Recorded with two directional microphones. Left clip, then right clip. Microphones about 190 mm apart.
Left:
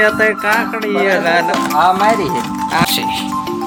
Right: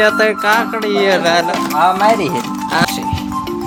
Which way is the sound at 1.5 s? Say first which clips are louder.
Left 1 dB; centre (ahead or behind).